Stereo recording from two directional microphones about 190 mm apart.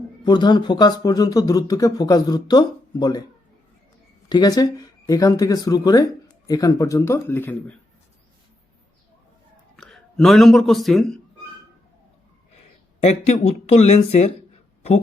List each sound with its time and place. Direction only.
0.3 s speech: 25° left (ahead or behind)
4.3 s speech: 20° left (ahead or behind)
9.7 s speech: 5° left (ahead or behind)
13.0 s speech: 35° left (ahead or behind)